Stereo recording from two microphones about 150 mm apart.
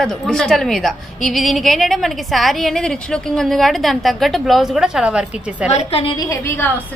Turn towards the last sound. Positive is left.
turn(degrees=15)  # may be behind; listen again after turning